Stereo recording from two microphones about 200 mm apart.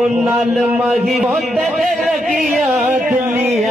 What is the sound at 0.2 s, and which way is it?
A man's voice, 5° right (ahead or behind).